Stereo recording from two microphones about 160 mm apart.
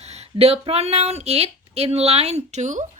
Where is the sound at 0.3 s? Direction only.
40° right (ahead or behind).